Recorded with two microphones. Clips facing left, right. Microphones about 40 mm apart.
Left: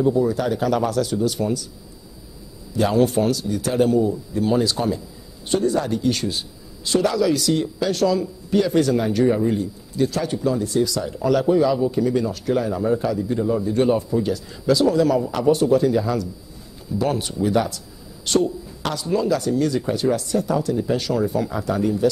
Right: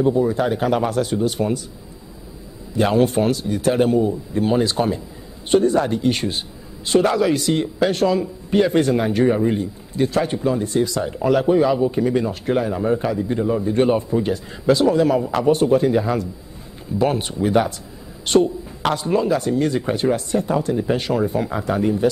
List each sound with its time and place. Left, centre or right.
0.0 s a man's voice: right
2.7 s a man's voice: right